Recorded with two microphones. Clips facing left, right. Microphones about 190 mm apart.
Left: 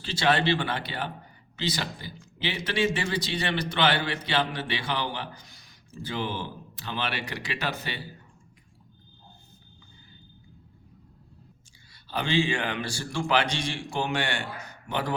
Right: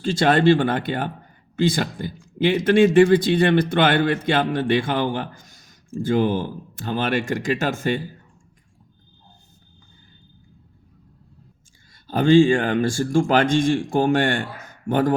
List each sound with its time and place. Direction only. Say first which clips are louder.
0.0 s speech: right 8 dB; 50° right (ahead or behind)
12.0 s speech: right 12 dB; 45° right (ahead or behind)